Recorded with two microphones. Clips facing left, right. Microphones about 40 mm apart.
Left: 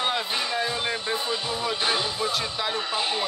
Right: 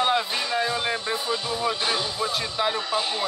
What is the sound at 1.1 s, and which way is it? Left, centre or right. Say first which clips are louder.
Speech: right 1 dB; centre.